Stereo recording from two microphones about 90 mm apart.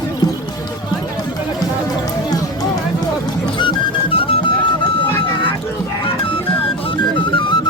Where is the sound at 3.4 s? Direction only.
60° left (ahead or behind); by 4.3 s 85° left.